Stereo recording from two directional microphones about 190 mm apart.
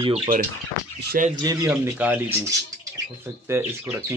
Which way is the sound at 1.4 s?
20° right (ahead or behind).